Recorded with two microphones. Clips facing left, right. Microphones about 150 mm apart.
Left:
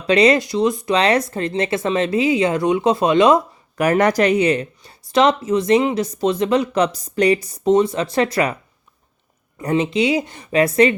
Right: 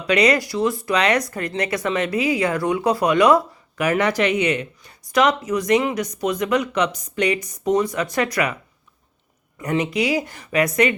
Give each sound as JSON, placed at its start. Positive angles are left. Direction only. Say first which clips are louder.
{"t": 0.1, "sound": "speech", "louder": "left 4 dB", "side_deg": 25}
{"t": 3.8, "sound": "speech", "louder": "left 4 dB", "side_deg": 45}
{"t": 9.6, "sound": "speech", "louder": "left 3 dB", "side_deg": 30}